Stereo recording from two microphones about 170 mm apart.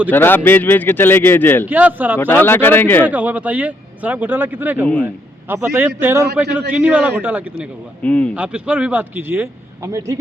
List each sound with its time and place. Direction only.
0.1 s speech: 10° left (ahead or behind)
1.6 s speech: 10° right (ahead or behind)
2.1 s speech: 10° left (ahead or behind)
3.1 s a man's voice: 10° right (ahead or behind)
8.0 s speech: 10° left (ahead or behind)
8.4 s speech: 10° right (ahead or behind)